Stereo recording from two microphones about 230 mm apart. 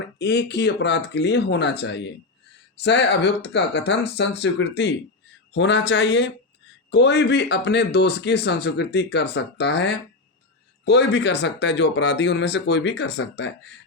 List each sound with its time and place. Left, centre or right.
0.2 s speech: left